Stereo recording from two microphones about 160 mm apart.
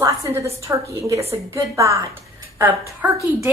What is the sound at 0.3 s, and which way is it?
A woman's voice, 15° right (ahead or behind).